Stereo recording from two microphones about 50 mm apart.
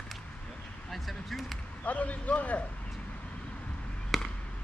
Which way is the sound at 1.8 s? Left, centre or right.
Left.